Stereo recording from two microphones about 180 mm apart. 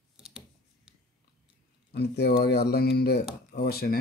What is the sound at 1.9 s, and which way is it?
Speech, 65° left (ahead or behind).